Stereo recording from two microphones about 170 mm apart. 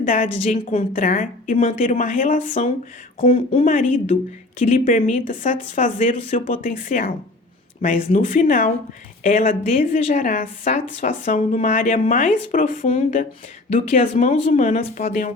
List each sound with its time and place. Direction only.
0.0 s a woman's voice: 50° left (ahead or behind)
3.2 s a woman's voice: 40° left (ahead or behind)